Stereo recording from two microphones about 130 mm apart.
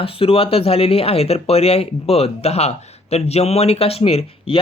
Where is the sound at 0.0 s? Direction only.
45° left (ahead or behind).